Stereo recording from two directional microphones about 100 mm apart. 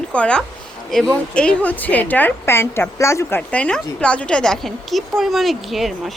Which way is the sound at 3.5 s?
10° left (ahead or behind).